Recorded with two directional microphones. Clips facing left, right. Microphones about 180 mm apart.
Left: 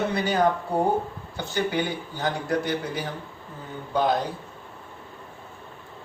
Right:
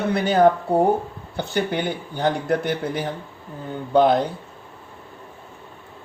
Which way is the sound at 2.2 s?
55° right (ahead or behind).